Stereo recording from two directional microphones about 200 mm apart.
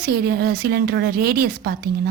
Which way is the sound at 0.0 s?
50° right (ahead or behind).